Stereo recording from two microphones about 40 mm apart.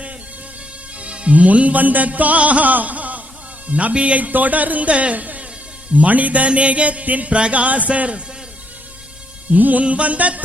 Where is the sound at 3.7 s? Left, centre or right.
Right.